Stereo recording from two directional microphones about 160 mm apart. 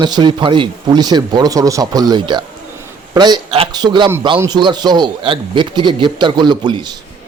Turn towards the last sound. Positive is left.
turn(degrees=-30)  # may be behind; listen again after turning